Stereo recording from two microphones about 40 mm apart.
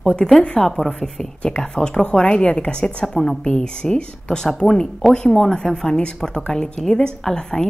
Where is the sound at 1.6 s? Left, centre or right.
Centre.